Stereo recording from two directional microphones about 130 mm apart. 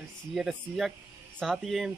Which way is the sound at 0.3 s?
Centre (ahead or behind).